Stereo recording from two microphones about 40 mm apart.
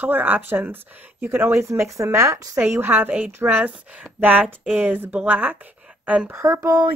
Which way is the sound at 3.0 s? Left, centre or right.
Right.